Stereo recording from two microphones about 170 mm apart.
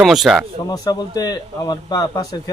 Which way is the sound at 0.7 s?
25° left (ahead or behind).